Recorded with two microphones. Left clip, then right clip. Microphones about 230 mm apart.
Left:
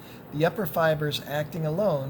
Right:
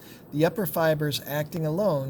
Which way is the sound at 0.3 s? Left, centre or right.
Right.